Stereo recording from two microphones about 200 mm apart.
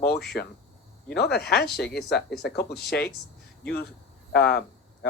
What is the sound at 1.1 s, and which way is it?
Speech, 55° left (ahead or behind).